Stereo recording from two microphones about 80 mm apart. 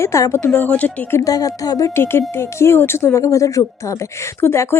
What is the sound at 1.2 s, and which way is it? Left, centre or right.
Speech, left.